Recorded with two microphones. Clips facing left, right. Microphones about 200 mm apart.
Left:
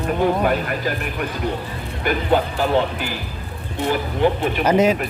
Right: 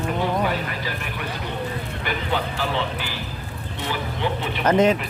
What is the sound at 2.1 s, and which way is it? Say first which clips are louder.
Speech: left 8 dB; 45° left (ahead or behind).